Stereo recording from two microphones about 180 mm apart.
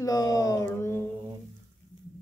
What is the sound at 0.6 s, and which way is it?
Mantra, 10° left (ahead or behind).